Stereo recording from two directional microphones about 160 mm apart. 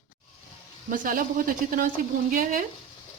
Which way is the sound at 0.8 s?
60° right (ahead or behind).